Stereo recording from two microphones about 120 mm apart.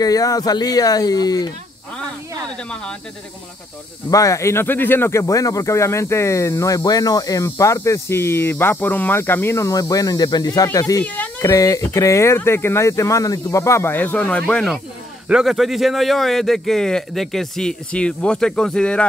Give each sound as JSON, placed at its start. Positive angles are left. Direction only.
{"t": 0.0, "sound": "speech", "side_deg": 30}
{"t": 2.7, "sound": "speech", "side_deg": 5}
{"t": 4.1, "sound": "speech", "side_deg": 25}
{"t": 11.1, "sound": "a sound", "side_deg": 15}
{"t": 11.4, "sound": "speech", "side_deg": 30}